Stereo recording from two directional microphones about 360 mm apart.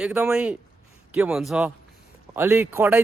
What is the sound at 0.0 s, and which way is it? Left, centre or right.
Speech, centre.